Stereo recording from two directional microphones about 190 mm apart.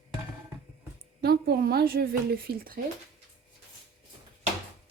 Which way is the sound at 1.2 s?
55° right (ahead or behind).